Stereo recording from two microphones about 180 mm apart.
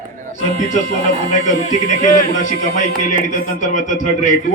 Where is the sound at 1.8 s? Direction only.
45° left (ahead or behind).